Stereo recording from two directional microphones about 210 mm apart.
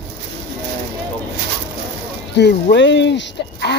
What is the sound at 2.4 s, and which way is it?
Speech, 55° left (ahead or behind).